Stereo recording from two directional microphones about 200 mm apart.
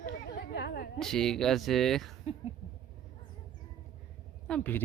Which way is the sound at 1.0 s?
5° left (ahead or behind).